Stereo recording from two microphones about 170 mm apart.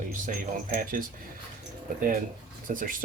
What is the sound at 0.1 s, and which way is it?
Speech, 50° right (ahead or behind).